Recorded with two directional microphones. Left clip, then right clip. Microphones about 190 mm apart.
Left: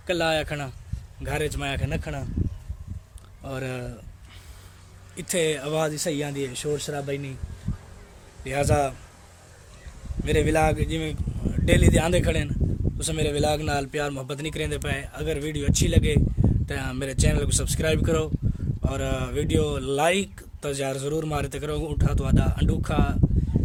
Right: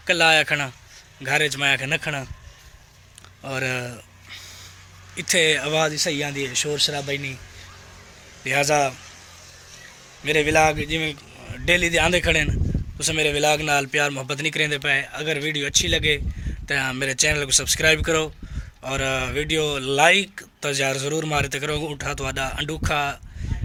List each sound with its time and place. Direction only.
0.0 s speech: centre (ahead or behind)
3.4 s speech: centre (ahead or behind)
5.1 s speech: 5° left (ahead or behind)
5.8 s speech: 15° left (ahead or behind)
8.4 s speech: 5° left (ahead or behind)
10.2 s speech: 10° left (ahead or behind)